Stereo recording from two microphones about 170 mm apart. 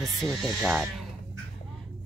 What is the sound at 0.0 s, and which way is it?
Speech, centre (ahead or behind).